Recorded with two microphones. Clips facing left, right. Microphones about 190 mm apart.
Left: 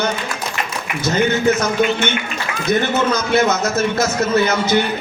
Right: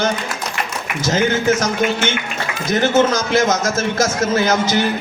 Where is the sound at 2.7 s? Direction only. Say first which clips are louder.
Right 2 dB; 90° right.